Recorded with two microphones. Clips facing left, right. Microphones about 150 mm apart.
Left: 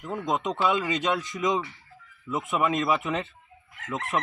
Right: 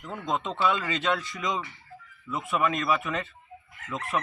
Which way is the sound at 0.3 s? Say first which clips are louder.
Left 1 dB; 15° left (ahead or behind).